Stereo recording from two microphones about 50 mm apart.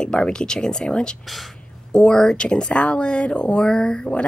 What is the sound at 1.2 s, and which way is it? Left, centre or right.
Speech, centre.